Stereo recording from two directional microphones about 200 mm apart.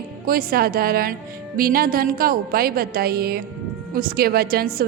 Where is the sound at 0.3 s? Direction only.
50° right (ahead or behind).